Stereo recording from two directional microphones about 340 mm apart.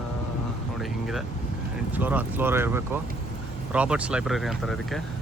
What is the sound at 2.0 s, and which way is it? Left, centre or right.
Speech, centre.